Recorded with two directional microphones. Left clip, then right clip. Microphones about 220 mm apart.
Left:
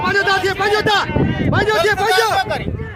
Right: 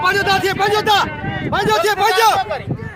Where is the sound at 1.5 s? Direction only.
20° right (ahead or behind).